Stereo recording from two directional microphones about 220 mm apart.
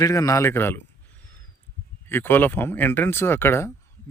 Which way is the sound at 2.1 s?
10° left (ahead or behind).